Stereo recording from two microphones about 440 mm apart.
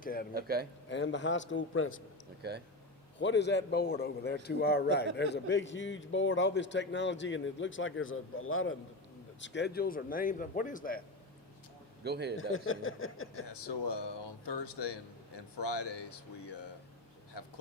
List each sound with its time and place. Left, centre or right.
0.0 s speech: centre
0.3 s a man's voice: right
0.9 s a man's voice: left
3.2 s a man's voice: left
12.0 s a man's voice: right
12.4 s a man's voice: left
13.5 s speech: left